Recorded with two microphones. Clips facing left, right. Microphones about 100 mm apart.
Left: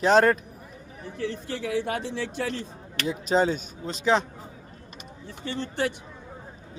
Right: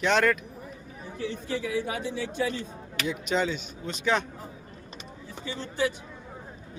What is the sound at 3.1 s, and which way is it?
Speech, 35° left (ahead or behind).